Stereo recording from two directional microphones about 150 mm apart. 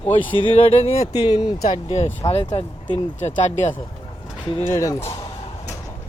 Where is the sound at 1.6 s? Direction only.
45° left (ahead or behind).